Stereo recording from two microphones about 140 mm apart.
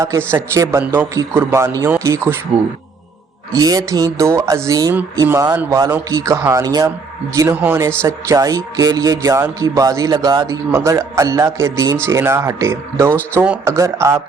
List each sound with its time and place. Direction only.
0.3 s speech: 20° right (ahead or behind)
3.5 s speech: 25° right (ahead or behind)
7.3 s speech: 15° right (ahead or behind)
13.7 s speech: 20° right (ahead or behind)